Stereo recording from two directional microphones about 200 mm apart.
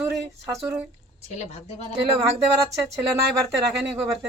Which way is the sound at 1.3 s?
35° left (ahead or behind).